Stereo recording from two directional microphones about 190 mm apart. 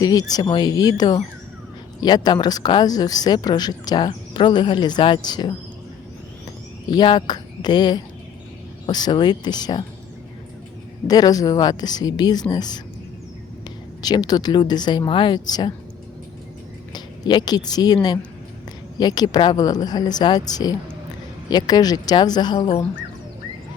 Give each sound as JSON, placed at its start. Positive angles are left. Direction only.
{"t": 0.0, "sound": "speech", "side_deg": 20}
{"t": 6.8, "sound": "speech", "side_deg": 20}
{"t": 11.1, "sound": "speech", "side_deg": 20}
{"t": 14.0, "sound": "speech", "side_deg": 20}
{"t": 16.9, "sound": "speech", "side_deg": 20}